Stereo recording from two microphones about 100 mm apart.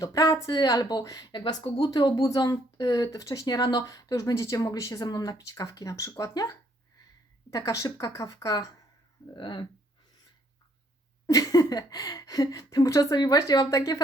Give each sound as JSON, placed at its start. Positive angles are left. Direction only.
{"t": 0.0, "sound": "speech", "side_deg": 35}
{"t": 1.6, "sound": "speech", "side_deg": 60}
{"t": 1.9, "sound": "speech", "side_deg": 45}
{"t": 9.3, "sound": "speech", "side_deg": 50}
{"t": 11.3, "sound": "speech", "side_deg": 35}